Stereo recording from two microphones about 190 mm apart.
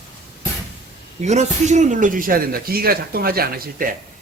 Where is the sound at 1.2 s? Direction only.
35° right (ahead or behind); by 3.9 s 50° right (ahead or behind).